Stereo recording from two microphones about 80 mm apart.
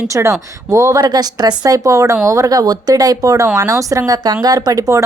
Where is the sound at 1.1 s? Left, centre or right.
Right.